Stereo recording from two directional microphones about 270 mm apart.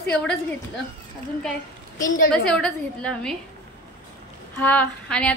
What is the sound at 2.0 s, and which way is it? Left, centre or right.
Speech, left.